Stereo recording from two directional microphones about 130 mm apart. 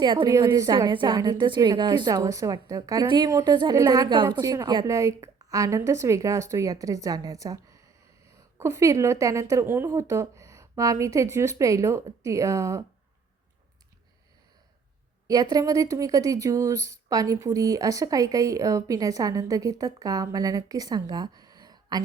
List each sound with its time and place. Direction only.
0.0 s a woman's voice: 35° right (ahead or behind)
15.3 s speech: 30° right (ahead or behind)